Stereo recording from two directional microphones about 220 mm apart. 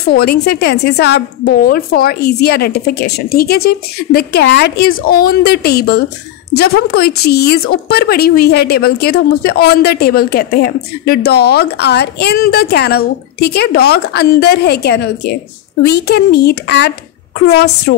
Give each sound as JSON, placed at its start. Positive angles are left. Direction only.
{"t": 0.1, "sound": "speech", "side_deg": 45}